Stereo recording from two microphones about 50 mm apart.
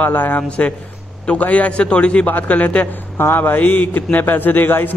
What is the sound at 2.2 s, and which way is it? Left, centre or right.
Speech, left.